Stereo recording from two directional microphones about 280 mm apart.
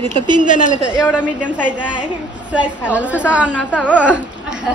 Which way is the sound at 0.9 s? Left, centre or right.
Centre.